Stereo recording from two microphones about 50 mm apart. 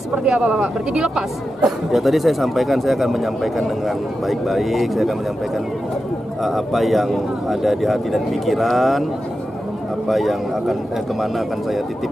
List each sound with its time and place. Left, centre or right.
0.2 s speech: centre
1.6 s speech: centre
6.4 s speech: centre
10.0 s speech: centre